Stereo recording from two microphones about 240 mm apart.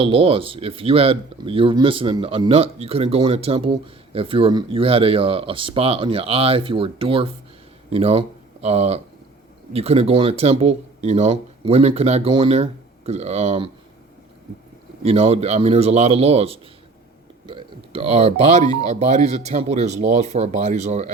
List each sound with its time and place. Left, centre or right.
0.0 s speech: right
15.0 s speech: right